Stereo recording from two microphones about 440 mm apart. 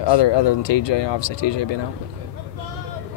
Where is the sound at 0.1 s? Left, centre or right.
Left.